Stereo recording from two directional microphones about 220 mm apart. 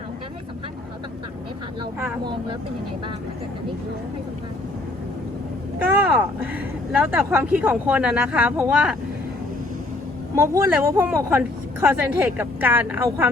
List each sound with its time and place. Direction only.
1.8 s vehicle: 10° right (ahead or behind)
5.9 s speech: 10° right (ahead or behind)
10.3 s speech: 10° right (ahead or behind)